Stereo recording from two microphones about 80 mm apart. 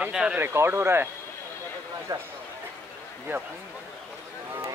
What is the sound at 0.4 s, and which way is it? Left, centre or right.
Speech, right.